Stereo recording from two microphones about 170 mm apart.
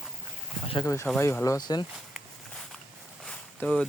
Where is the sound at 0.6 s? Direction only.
30° left (ahead or behind).